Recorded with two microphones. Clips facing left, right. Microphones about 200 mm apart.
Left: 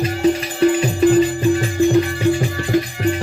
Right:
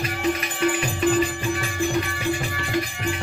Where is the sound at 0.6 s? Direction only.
30° left (ahead or behind).